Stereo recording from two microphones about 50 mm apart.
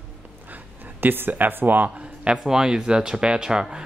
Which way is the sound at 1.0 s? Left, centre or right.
Right.